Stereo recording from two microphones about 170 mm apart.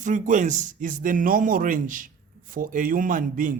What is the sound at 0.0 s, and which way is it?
A man's voice, 45° right (ahead or behind).